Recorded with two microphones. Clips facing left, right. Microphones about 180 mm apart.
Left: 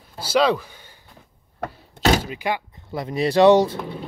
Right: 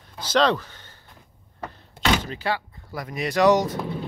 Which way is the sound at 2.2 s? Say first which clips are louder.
Left 2 dB; 15° left (ahead or behind).